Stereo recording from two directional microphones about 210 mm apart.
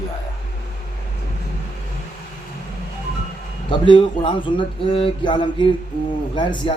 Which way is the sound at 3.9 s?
25° left (ahead or behind).